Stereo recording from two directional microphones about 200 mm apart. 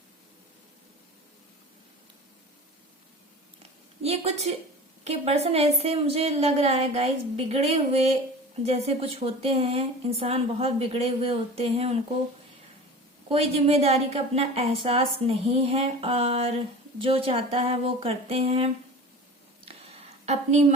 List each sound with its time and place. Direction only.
4.0 s a woman's voice: 30° right (ahead or behind)
13.2 s speech: 30° right (ahead or behind)
20.2 s a woman's voice: 35° right (ahead or behind)